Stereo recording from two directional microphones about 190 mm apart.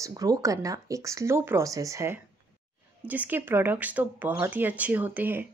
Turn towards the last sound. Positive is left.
turn(degrees=-10)  # may be behind; listen again after turning